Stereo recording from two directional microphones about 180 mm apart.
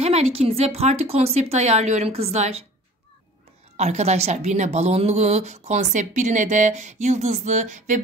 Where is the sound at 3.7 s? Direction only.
35° right (ahead or behind).